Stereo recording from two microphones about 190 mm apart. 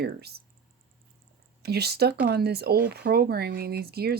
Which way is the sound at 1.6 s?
55° right (ahead or behind).